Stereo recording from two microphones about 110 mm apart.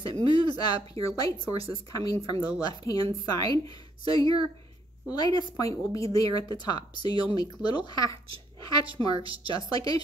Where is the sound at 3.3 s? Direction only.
35° left (ahead or behind).